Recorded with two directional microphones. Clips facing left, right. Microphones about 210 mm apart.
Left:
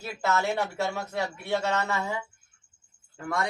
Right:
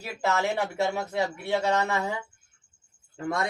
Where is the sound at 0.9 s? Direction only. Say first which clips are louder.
Right 3 dB; 15° right (ahead or behind).